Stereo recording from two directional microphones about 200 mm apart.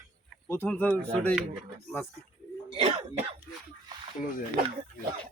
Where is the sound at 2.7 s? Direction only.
30° right (ahead or behind).